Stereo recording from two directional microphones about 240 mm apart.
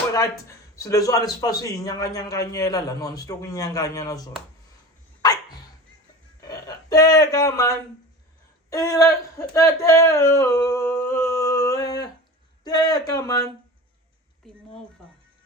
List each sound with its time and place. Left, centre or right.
0.8 s a man's voice: centre
5.2 s dog: centre
6.4 s a sound: centre
8.7 s a man's voice: centre